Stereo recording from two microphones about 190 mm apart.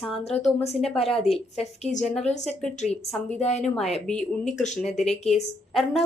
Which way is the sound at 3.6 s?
Centre (ahead or behind).